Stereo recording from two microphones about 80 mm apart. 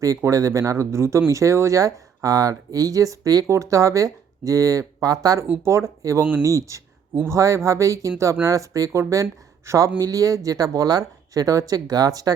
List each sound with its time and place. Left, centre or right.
0.0 s speech: right
5.5 s speech: right
6.6 s a sound: right
7.2 s speech: right